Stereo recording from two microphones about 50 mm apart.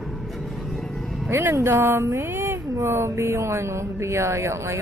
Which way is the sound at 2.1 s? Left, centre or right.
Right.